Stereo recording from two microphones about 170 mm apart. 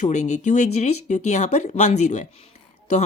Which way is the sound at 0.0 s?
45° left (ahead or behind).